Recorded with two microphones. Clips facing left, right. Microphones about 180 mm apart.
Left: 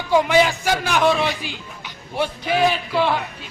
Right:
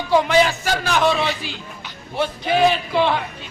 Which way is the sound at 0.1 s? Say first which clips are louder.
Even; 10° left (ahead or behind).